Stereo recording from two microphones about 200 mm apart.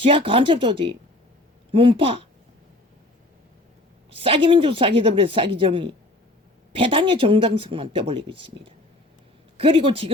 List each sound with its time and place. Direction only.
0.0 s speech: 25° right (ahead or behind)
4.1 s speech: 25° right (ahead or behind)